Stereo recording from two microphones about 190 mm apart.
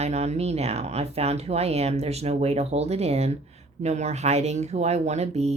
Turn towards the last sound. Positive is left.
turn(degrees=-35)  # may be behind; listen again after turning